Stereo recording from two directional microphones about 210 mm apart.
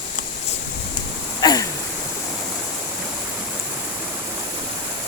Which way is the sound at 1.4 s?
20° left (ahead or behind).